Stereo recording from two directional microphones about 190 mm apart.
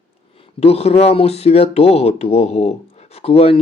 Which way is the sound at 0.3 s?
30° left (ahead or behind).